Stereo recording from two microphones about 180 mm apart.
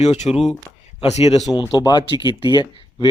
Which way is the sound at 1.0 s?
35° left (ahead or behind).